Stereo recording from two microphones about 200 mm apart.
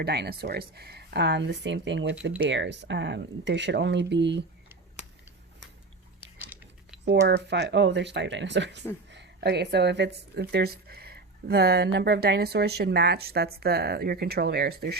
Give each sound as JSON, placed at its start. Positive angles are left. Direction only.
{"t": 0.0, "sound": "speech", "side_deg": -55}
{"t": 6.4, "sound": "a sound", "side_deg": -10}
{"t": 7.0, "sound": "speech", "side_deg": -60}